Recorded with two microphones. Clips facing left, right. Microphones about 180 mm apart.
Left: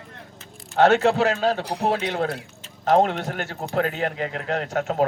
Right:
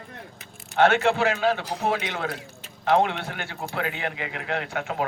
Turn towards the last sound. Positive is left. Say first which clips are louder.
# left 4 dB
turn(degrees=40)  # may be behind; listen again after turning